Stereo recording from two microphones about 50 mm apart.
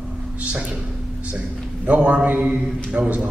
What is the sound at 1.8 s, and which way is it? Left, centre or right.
A man's voice, right.